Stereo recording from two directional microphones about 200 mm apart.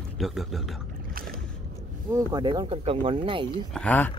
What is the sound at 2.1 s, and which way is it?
Speech, 20° right (ahead or behind).